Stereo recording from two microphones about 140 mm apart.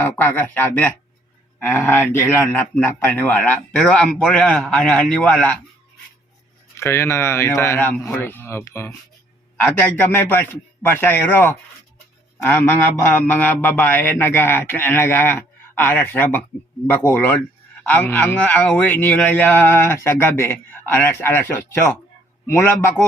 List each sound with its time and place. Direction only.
0.0 s speech: 15° left (ahead or behind)
6.7 s speech: 20° left (ahead or behind)